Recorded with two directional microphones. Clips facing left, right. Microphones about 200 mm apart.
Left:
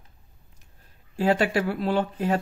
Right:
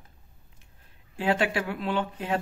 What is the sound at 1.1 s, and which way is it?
Speech, 40° left (ahead or behind).